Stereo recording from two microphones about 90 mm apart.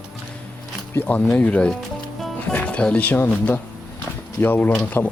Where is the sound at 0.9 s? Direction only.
15° left (ahead or behind).